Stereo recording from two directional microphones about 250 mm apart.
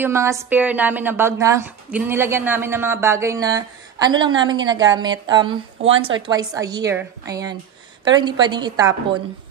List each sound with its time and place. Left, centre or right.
0.0 s a woman's voice: centre